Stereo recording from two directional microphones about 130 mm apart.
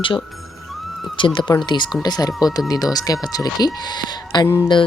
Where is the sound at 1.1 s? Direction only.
35° left (ahead or behind).